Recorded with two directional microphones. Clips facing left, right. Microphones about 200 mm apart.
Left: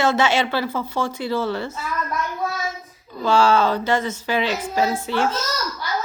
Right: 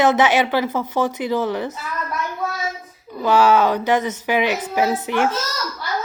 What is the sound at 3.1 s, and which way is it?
A woman's voice, 15° right (ahead or behind).